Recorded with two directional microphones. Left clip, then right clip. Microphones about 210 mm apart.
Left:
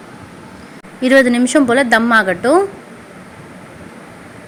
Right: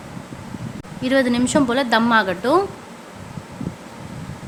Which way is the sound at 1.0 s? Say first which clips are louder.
Left 7 dB; 20° left (ahead or behind).